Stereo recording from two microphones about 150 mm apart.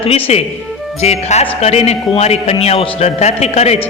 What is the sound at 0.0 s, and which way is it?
A man's voice, 45° left (ahead or behind).